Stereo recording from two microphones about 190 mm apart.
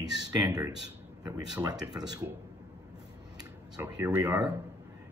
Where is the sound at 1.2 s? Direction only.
20° right (ahead or behind).